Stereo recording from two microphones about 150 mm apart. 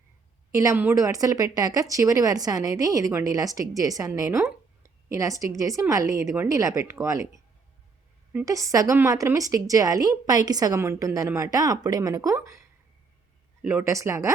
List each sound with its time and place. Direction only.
0.5 s speech: 20° right (ahead or behind)
8.3 s a woman's voice: 10° right (ahead or behind)
8.5 s speech: 20° right (ahead or behind)
13.6 s speech: 10° right (ahead or behind)